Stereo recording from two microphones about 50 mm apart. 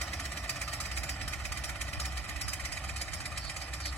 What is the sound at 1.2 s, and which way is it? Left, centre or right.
Vehicle, left.